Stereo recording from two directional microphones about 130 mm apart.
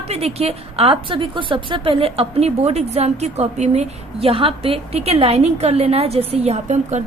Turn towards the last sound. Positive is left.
turn(degrees=-60)  # may be behind; listen again after turning